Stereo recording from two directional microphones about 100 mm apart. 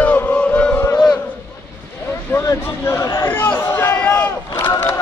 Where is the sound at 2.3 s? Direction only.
20° left (ahead or behind).